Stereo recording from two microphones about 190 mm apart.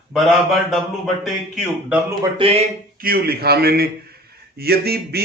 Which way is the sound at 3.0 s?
50° right (ahead or behind).